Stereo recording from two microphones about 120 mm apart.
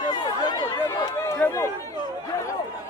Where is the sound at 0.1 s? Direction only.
35° left (ahead or behind).